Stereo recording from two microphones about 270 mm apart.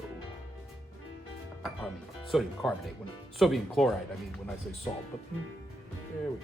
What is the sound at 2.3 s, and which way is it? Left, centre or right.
Speech, centre.